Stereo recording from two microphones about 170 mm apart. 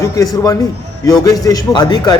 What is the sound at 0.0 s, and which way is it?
A man's voice, 20° left (ahead or behind).